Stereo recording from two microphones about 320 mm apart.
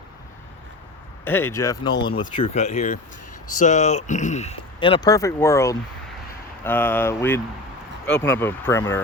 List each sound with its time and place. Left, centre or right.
1.2 s speech: centre